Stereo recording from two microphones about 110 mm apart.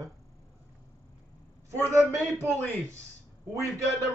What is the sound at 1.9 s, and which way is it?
Speech, 25° right (ahead or behind).